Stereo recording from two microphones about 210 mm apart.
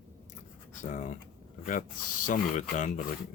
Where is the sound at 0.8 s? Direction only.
35° left (ahead or behind).